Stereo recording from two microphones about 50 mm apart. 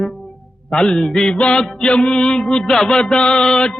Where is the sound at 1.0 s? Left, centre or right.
Centre.